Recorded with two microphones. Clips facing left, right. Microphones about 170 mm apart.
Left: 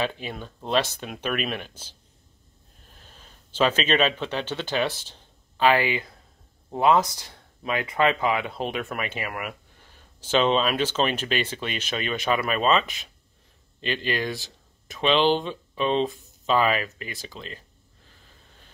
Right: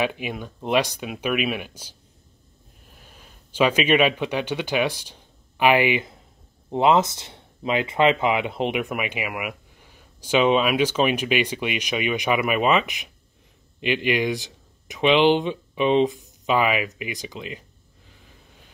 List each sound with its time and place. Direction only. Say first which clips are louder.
0.0 s speech: right 3 dB; 15° right (ahead or behind)